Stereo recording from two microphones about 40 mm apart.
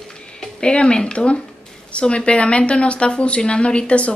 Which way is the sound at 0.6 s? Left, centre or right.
Left.